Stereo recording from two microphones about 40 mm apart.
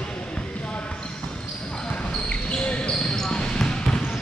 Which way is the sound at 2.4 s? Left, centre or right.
Left.